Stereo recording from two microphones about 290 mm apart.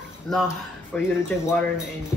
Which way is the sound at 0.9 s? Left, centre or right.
Centre.